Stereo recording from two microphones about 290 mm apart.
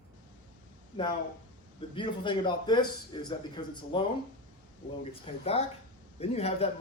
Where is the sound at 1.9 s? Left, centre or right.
Centre.